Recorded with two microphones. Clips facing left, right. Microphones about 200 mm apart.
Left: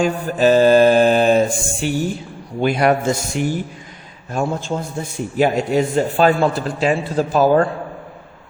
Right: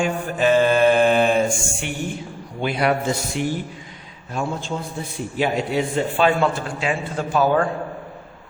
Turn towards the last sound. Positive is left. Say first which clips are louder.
# left 5 dB
turn(degrees=40)  # may be behind; listen again after turning